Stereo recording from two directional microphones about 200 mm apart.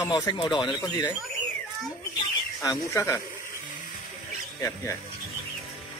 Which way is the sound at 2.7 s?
15° left (ahead or behind).